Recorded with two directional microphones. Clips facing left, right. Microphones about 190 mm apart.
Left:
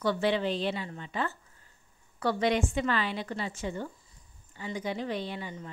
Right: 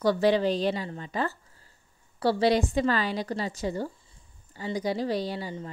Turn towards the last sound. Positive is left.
turn(degrees=-35)  # may be behind; listen again after turning